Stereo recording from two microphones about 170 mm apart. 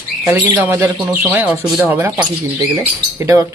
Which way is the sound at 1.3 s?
5° right (ahead or behind).